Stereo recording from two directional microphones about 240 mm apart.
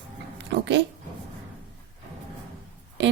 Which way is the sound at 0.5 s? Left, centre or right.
Right.